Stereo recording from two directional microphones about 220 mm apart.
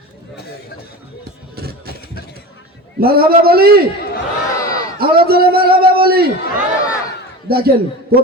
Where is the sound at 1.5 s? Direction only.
45° right (ahead or behind).